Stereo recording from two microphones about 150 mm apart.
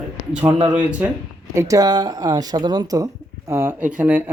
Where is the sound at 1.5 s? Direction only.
20° right (ahead or behind).